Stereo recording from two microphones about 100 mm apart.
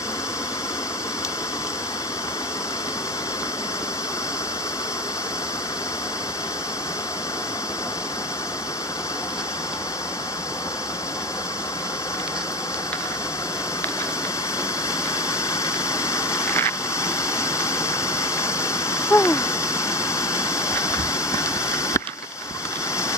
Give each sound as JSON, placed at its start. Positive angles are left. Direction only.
{"t": 15.6, "sound": "vehicle", "side_deg": 30}